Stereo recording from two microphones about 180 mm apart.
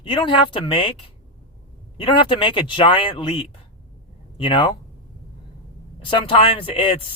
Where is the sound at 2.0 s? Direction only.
30° left (ahead or behind).